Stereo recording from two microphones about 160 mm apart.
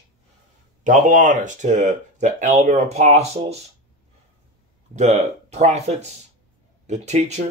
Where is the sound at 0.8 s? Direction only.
55° right (ahead or behind).